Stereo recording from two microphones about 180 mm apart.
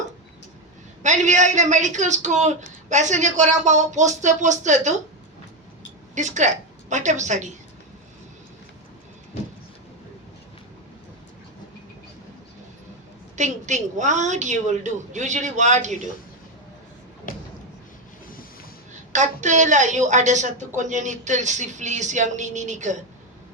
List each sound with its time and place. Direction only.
1.0 s a woman's voice: 40° right (ahead or behind)
6.1 s a woman's voice: 40° right (ahead or behind)
13.3 s a woman's voice: 40° right (ahead or behind)
17.3 s a sound: 50° left (ahead or behind)
19.1 s a woman's voice: 40° right (ahead or behind)